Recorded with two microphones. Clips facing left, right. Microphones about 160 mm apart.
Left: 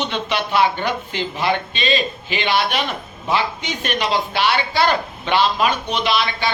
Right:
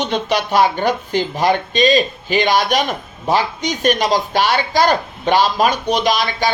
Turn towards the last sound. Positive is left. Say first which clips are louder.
# right 3 dB
turn(degrees=-40)  # may be behind; listen again after turning